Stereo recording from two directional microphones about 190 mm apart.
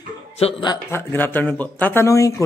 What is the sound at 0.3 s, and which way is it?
Speech, 30° left (ahead or behind).